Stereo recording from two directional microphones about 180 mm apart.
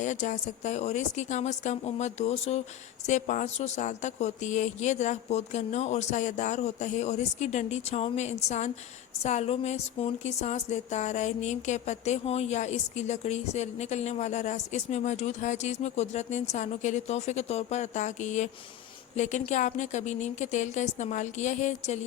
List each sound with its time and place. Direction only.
0.0 s a woman's voice: 40° left (ahead or behind)